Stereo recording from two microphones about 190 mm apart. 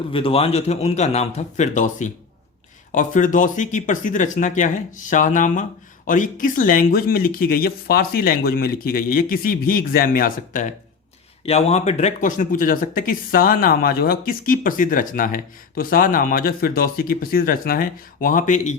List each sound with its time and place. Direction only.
0.1 s speech: 30° left (ahead or behind); by 10.7 s 45° left (ahead or behind)
11.4 s speech: 35° left (ahead or behind)